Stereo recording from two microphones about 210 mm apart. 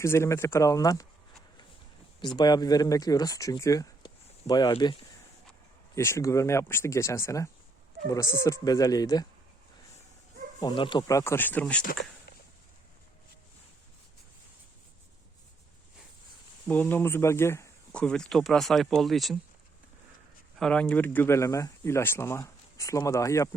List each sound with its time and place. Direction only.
0.0 s speech: 15° left (ahead or behind)
2.2 s speech: 20° left (ahead or behind)
10.6 s speech: 20° left (ahead or behind)
16.6 s speech: 10° left (ahead or behind)
20.6 s speech: 5° left (ahead or behind)